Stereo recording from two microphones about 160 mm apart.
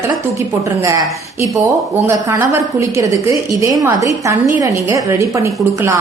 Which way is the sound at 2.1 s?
15° right (ahead or behind).